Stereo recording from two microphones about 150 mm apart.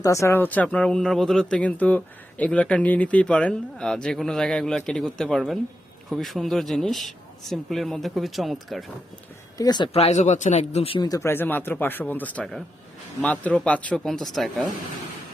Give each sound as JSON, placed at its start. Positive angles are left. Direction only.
{"t": 0.0, "sound": "speech", "side_deg": 20}
{"t": 9.6, "sound": "speech", "side_deg": 30}
{"t": 11.1, "sound": "speech", "side_deg": 15}